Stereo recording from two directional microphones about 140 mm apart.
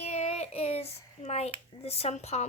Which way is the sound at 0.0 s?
50° left (ahead or behind).